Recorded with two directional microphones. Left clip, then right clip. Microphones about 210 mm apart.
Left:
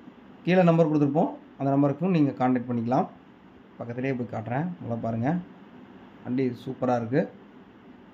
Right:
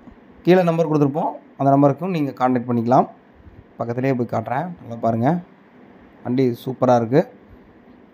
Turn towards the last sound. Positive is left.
turn(degrees=-35)  # may be behind; listen again after turning